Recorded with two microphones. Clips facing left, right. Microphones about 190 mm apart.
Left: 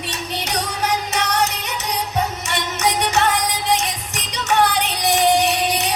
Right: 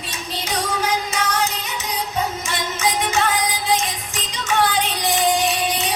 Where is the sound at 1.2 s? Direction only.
70° left (ahead or behind).